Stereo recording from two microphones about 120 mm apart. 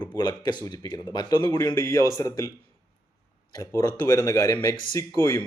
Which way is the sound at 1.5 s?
25° left (ahead or behind).